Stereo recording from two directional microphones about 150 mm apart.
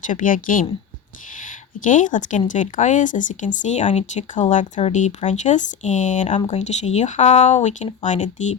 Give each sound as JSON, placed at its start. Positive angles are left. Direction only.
{"t": 0.0, "sound": "speech", "side_deg": 60}